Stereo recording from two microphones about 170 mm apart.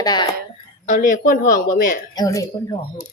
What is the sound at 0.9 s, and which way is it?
Speech, 50° left (ahead or behind).